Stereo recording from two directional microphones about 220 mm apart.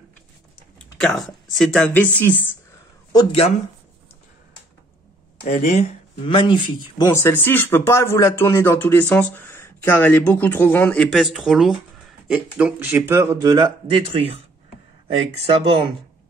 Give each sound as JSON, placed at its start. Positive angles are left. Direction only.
{"t": 1.0, "sound": "speech", "side_deg": 0}
{"t": 3.1, "sound": "speech", "side_deg": 20}
{"t": 5.4, "sound": "speech", "side_deg": 30}
{"t": 7.1, "sound": "speech", "side_deg": 10}